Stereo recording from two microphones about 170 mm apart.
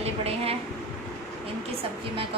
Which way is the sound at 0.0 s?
35° right (ahead or behind).